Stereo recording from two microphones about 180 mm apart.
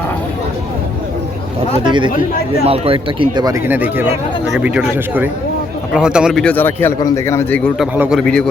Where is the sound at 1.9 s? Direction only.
25° right (ahead or behind); by 7.7 s 10° left (ahead or behind).